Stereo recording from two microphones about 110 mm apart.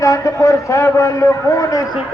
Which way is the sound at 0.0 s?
30° left (ahead or behind).